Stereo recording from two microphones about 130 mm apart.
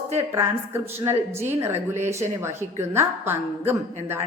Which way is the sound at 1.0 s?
20° right (ahead or behind).